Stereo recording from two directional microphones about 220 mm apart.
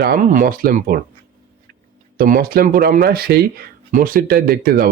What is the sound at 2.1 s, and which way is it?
Speech, 40° right (ahead or behind).